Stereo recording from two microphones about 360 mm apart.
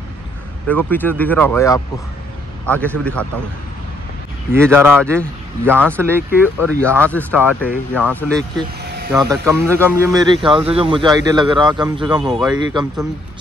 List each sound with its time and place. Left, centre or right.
0.7 s a man's voice: centre
4.5 s a man's voice: centre
7.0 s speech: centre
8.8 s vehicle: right
9.1 s a man's voice: centre